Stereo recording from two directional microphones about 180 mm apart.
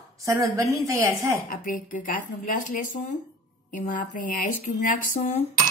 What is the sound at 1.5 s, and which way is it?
Speech, 50° left (ahead or behind).